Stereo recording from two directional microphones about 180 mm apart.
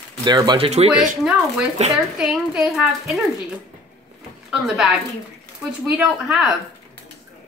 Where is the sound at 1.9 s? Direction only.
Centre (ahead or behind).